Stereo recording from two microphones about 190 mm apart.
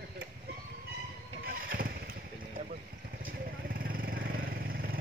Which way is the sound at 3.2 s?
50° right (ahead or behind).